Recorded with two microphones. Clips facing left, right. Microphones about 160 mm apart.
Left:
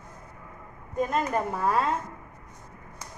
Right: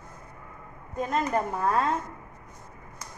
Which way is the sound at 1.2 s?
10° left (ahead or behind).